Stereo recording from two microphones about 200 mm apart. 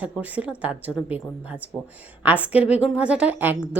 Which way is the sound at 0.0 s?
5° right (ahead or behind).